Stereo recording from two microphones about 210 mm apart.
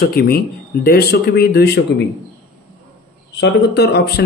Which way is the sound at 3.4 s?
55° left (ahead or behind).